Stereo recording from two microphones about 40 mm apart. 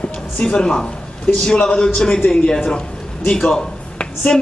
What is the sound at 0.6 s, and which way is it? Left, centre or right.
A man's voice, centre.